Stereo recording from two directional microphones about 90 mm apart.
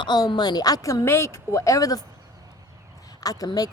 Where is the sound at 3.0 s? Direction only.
45° left (ahead or behind).